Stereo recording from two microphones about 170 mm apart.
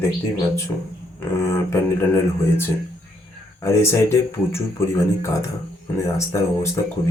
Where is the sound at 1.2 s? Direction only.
15° left (ahead or behind).